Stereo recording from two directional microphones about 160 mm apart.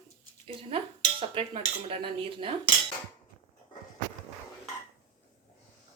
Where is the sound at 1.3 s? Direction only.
35° right (ahead or behind).